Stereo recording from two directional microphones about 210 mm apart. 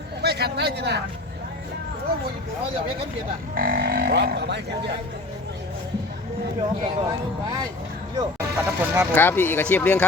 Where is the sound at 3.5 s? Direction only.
45° right (ahead or behind).